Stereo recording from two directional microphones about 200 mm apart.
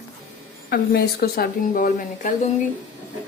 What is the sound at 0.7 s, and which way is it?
A woman's voice, 50° left (ahead or behind).